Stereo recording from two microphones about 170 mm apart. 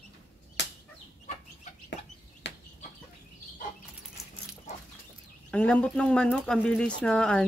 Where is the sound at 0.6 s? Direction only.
90° left.